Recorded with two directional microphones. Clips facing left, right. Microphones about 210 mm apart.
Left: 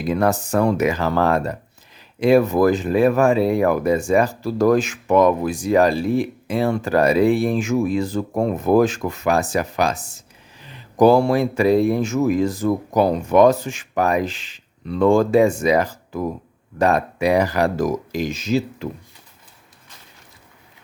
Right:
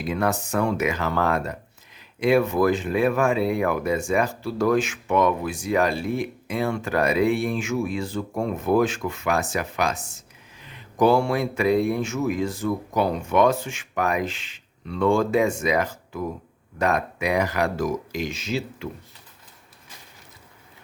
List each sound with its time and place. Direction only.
0.0 s speech: 35° left (ahead or behind)